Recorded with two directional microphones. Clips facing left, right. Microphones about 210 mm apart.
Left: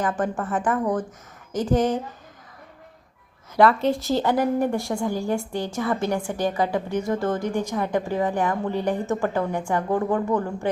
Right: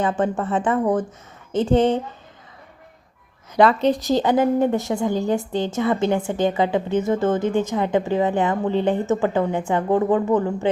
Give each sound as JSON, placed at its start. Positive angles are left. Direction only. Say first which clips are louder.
{"t": 0.0, "sound": "a woman's voice", "louder": "right 4 dB", "side_deg": -25}
{"t": 3.5, "sound": "a woman's voice", "louder": "right 2 dB", "side_deg": -20}